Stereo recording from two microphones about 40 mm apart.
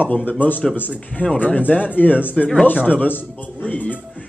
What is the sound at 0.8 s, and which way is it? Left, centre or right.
Speech, left.